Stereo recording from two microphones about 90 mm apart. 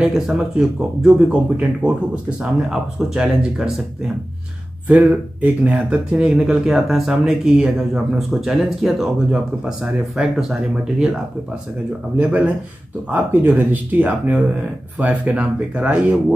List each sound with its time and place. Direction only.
0.0 s speech: 5° right (ahead or behind)
4.8 s speech: 20° right (ahead or behind)
12.2 s speech: 15° right (ahead or behind)